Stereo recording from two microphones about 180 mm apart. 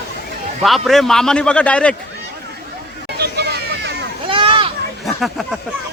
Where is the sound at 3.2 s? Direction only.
65° right (ahead or behind).